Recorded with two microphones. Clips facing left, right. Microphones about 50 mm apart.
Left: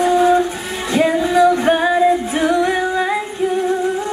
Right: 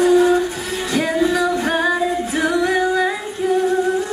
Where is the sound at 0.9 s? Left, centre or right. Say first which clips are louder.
Left 3 dB; left.